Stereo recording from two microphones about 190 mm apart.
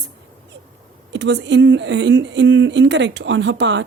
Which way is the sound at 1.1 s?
65° right (ahead or behind).